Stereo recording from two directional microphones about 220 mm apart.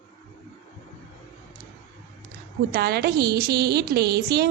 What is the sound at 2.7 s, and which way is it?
A woman's voice, 45° right (ahead or behind).